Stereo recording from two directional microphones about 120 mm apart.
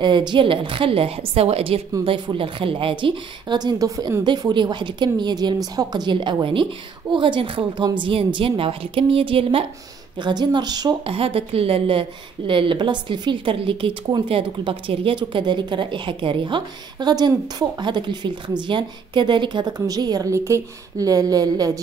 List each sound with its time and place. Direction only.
0.0 s a woman's voice: 40° right (ahead or behind)
10.1 s speech: 40° right (ahead or behind)
11.1 s a woman's voice: 50° right (ahead or behind); by 21.7 s 30° right (ahead or behind)